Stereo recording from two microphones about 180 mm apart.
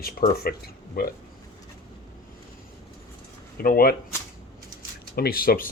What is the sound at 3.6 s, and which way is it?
Speech, 55° left (ahead or behind).